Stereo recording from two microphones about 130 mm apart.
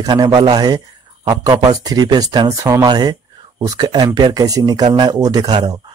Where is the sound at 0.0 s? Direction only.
30° right (ahead or behind).